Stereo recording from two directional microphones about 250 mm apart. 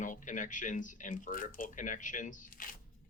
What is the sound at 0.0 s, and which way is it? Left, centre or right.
Speech, left.